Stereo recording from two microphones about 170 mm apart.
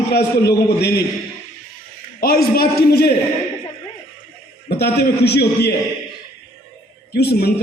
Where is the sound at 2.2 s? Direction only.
60° left (ahead or behind).